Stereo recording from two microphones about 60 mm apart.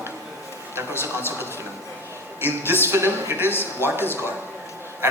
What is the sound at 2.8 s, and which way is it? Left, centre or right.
Speech, right.